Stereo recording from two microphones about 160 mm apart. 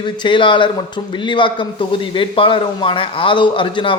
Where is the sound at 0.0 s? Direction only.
30° left (ahead or behind).